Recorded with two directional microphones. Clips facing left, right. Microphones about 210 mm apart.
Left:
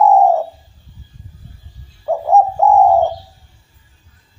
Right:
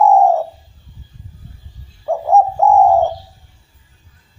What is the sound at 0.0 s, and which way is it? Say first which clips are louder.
Bird: even; centre (ahead or behind).